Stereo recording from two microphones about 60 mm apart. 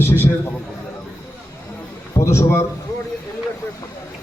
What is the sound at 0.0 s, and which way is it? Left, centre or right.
Speech, left.